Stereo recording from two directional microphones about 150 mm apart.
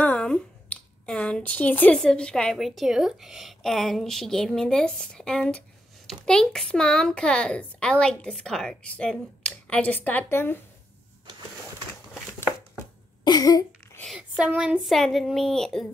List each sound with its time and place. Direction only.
0.0 s speech: 10° left (ahead or behind)
13.2 s a sound: 25° left (ahead or behind)
14.0 s speech: 5° right (ahead or behind)